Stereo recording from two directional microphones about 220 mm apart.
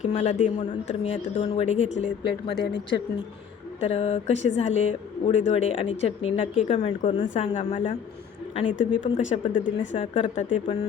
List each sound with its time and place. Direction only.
0.0 s speech: 30° left (ahead or behind)
2.2 s speech: 50° left (ahead or behind)
3.8 s speech: 30° left (ahead or behind)
9.0 s speech: 25° left (ahead or behind)